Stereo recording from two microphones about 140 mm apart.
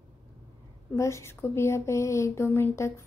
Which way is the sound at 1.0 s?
20° left (ahead or behind).